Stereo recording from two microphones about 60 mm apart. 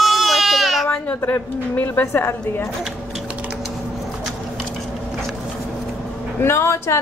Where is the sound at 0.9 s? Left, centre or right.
Left.